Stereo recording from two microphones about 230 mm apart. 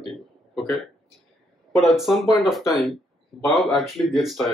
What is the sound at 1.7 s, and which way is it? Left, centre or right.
Speech, centre.